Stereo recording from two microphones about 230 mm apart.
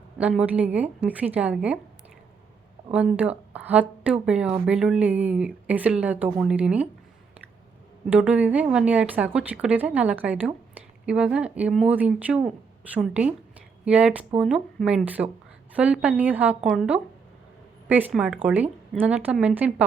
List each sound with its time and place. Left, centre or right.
0.2 s a woman's voice: centre
2.9 s speech: centre
8.1 s a woman's voice: centre